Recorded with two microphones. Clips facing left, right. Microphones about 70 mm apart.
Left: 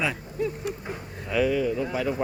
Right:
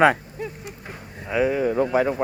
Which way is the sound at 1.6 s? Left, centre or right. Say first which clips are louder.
Right 7 dB; right.